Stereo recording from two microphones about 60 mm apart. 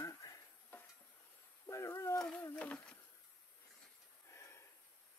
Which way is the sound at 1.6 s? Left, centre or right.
Left.